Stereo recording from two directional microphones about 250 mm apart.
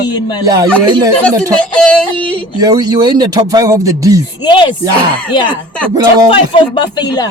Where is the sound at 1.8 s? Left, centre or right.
Centre.